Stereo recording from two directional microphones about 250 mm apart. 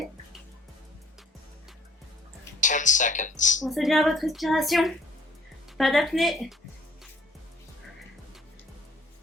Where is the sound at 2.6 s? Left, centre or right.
Left.